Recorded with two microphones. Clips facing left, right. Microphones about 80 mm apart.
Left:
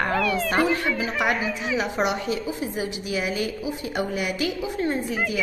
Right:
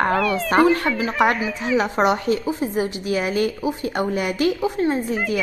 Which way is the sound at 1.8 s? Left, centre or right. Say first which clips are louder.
Right 6 dB; right.